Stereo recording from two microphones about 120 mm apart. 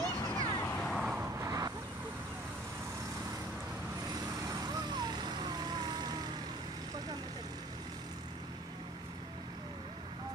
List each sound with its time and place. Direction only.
0.3 s a sound: 35° left (ahead or behind)
0.6 s vehicle: 10° left (ahead or behind)
1.0 s vehicle: 5° right (ahead or behind)
1.4 s vehicle: 30° right (ahead or behind)
4.5 s vehicle: 30° right (ahead or behind)